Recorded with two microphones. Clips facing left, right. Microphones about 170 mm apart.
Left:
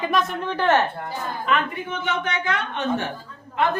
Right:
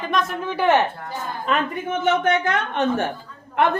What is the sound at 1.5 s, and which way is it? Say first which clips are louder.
Speech: right 1 dB; 40° right (ahead or behind).